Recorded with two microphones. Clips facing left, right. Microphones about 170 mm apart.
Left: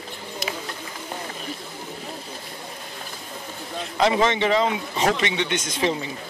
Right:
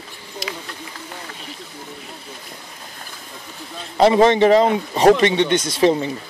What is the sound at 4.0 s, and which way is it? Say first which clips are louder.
A man's voice: right 7 dB; 35° right (ahead or behind).